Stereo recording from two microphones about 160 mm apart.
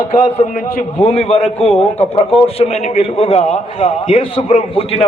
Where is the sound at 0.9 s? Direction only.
35° left (ahead or behind).